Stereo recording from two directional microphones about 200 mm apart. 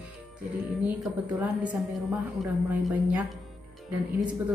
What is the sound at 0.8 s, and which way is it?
A woman's voice, 5° right (ahead or behind).